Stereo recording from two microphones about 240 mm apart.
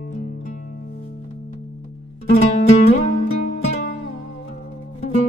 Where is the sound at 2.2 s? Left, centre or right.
Left.